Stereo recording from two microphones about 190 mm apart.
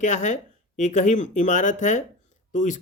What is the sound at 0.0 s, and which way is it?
Speech, 40° left (ahead or behind).